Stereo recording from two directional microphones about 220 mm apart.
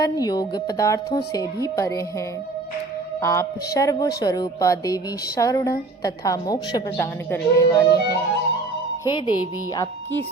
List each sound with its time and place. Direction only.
0.0 s a woman's voice: 15° left (ahead or behind)
3.2 s a woman's voice: 15° left (ahead or behind)